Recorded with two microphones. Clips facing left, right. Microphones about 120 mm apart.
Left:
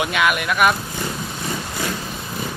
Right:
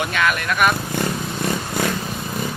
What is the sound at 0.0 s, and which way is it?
Speech, 10° left (ahead or behind).